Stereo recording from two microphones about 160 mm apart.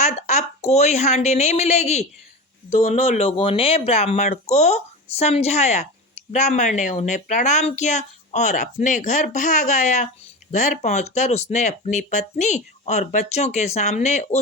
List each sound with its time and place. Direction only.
0.0 s speech: 45° left (ahead or behind)